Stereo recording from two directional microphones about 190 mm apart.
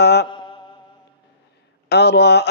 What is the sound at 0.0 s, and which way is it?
Mantra, 60° left (ahead or behind).